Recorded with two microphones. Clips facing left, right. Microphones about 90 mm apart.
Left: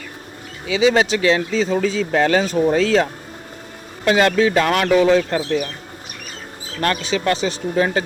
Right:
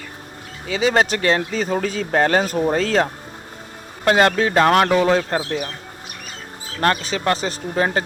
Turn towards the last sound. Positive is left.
turn(degrees=-40)  # may be behind; listen again after turning